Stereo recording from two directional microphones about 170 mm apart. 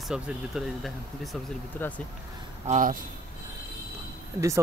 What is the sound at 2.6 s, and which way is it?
Speech, 50° right (ahead or behind).